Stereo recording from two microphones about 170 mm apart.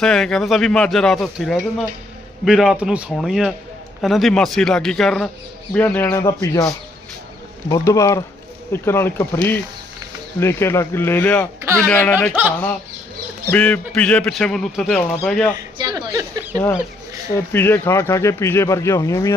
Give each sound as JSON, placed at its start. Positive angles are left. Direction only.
{"t": 0.0, "sound": "a man's voice", "side_deg": 5}
{"t": 11.6, "sound": "speech", "side_deg": -15}
{"t": 11.9, "sound": "speech", "side_deg": 10}
{"t": 13.5, "sound": "a man's voice", "side_deg": 10}
{"t": 15.8, "sound": "speech", "side_deg": -25}
{"t": 17.3, "sound": "speech", "side_deg": 15}